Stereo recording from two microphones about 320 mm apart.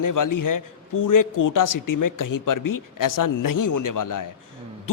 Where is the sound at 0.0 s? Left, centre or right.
Left.